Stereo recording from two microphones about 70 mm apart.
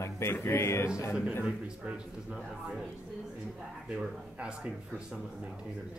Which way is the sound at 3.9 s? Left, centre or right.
Centre.